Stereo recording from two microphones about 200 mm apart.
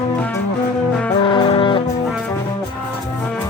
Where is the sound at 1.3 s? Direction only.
25° left (ahead or behind).